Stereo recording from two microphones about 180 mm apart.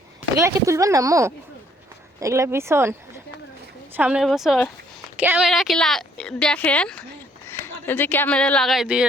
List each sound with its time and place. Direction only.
0.3 s speech: 15° right (ahead or behind)
3.9 s speech: 5° right (ahead or behind)